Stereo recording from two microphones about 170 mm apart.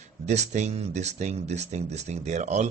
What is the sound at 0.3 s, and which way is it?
Speech, 40° right (ahead or behind).